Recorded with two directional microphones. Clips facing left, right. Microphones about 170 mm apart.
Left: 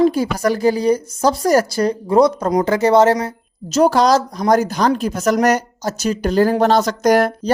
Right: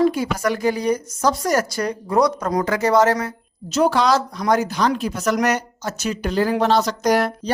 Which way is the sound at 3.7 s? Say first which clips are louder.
Left 4 dB; 40° left (ahead or behind).